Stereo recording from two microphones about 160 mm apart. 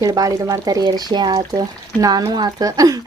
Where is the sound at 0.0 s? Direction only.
20° right (ahead or behind).